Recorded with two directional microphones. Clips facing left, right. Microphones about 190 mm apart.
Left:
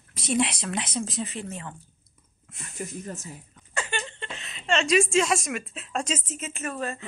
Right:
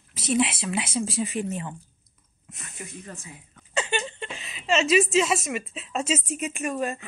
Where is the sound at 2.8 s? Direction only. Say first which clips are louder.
Left 5 dB; 40° left (ahead or behind).